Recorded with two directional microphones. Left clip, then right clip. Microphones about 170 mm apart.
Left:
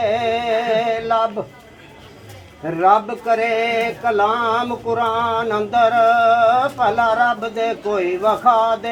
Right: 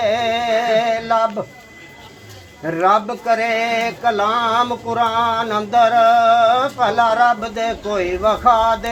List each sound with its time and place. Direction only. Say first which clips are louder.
0.0 s music: right 1 dB; 40° right (ahead or behind)
2.6 s speech: left 1 dB; 40° right (ahead or behind)